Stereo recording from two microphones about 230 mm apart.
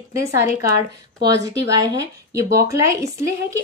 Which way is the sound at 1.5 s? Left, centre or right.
Centre.